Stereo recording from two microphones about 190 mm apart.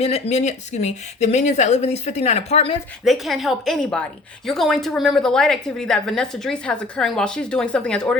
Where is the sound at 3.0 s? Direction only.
Centre (ahead or behind).